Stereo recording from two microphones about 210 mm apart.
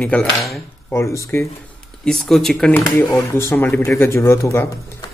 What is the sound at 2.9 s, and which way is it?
Speech, 15° left (ahead or behind).